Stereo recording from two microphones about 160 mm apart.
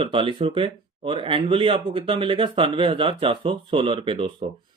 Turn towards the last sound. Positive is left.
turn(degrees=-35)  # may be behind; listen again after turning